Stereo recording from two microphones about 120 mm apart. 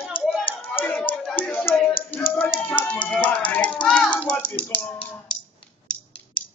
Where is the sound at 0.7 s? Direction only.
15° left (ahead or behind).